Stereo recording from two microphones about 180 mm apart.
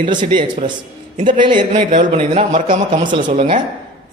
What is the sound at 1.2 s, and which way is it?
A man's voice, 25° right (ahead or behind).